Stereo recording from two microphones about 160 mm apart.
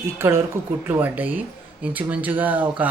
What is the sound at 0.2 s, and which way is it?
Speech, 15° right (ahead or behind).